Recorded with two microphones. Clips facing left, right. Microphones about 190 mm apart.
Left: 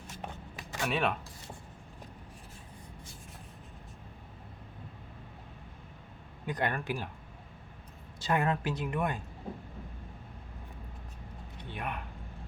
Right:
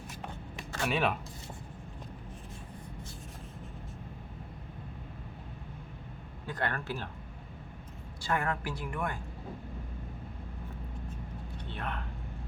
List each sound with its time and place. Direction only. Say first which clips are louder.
0.8 s speech: right 1 dB; centre (ahead or behind)
6.4 s a man's voice: left 2 dB; 15° left (ahead or behind)
8.2 s a woman's voice: left 3 dB; 20° left (ahead or behind)
11.7 s speech: left 1 dB; 15° left (ahead or behind)